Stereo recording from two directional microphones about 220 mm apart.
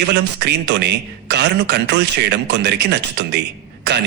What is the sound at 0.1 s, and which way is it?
A man's voice, 50° right (ahead or behind).